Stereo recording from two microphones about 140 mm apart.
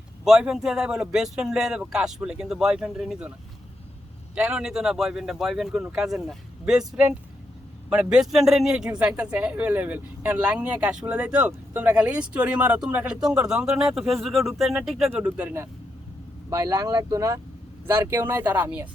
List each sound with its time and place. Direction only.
0.3 s speech: 5° right (ahead or behind)
4.4 s a man's voice: 5° right (ahead or behind)